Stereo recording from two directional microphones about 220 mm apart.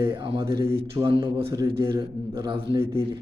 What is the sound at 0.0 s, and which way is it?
A man's voice, 25° right (ahead or behind).